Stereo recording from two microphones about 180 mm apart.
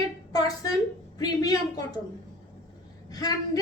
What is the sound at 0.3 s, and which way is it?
A woman's voice, 20° left (ahead or behind).